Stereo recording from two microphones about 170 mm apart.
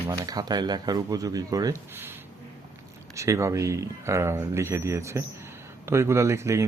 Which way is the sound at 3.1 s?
15° right (ahead or behind).